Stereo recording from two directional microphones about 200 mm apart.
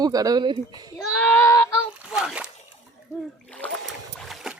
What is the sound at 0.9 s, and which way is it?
Speech, centre (ahead or behind).